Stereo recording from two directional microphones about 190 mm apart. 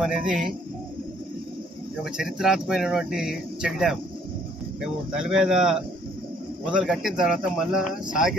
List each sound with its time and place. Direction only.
0.0 s speech: 5° right (ahead or behind)
2.1 s speech: centre (ahead or behind)